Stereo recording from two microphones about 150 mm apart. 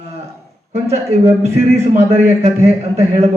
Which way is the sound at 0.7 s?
45° right (ahead or behind).